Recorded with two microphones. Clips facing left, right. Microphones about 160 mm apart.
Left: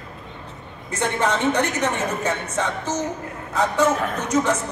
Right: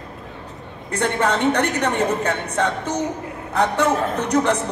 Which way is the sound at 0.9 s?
60° right (ahead or behind).